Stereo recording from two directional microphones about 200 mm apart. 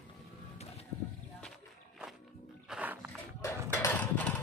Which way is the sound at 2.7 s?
5° right (ahead or behind).